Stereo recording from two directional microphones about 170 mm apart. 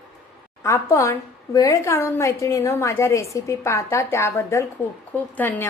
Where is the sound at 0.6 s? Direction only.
15° left (ahead or behind).